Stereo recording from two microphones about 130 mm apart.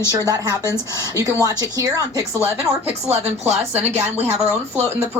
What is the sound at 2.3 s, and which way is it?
Speech, 15° right (ahead or behind).